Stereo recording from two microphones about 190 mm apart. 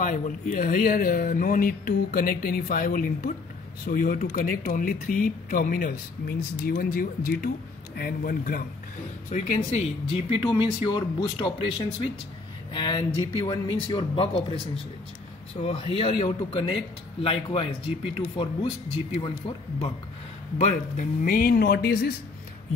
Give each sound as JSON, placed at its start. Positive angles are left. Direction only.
{"t": 0.0, "sound": "speech", "side_deg": 45}
{"t": 10.3, "sound": "a man's voice", "side_deg": 25}
{"t": 12.7, "sound": "a man's voice", "side_deg": 25}
{"t": 15.6, "sound": "a man's voice", "side_deg": 30}
{"t": 20.5, "sound": "speech", "side_deg": 40}